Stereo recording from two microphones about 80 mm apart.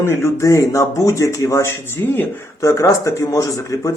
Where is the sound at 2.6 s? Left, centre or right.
Left.